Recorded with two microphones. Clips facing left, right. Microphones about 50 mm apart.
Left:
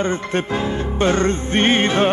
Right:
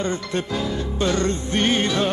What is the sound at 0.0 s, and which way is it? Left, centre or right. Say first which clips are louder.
Music: left 4 dB; left.